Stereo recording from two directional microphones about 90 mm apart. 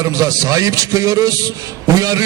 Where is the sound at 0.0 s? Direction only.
40° right (ahead or behind).